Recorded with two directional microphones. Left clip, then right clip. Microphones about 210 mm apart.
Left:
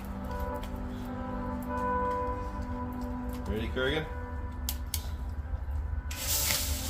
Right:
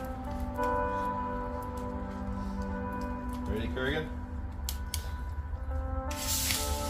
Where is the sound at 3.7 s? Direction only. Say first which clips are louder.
Left 3 dB; centre (ahead or behind).